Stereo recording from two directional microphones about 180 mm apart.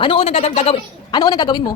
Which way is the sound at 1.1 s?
25° left (ahead or behind).